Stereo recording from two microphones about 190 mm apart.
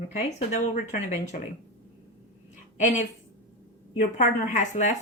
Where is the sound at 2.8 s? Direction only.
40° left (ahead or behind).